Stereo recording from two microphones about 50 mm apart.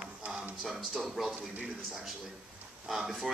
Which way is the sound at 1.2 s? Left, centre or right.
Centre.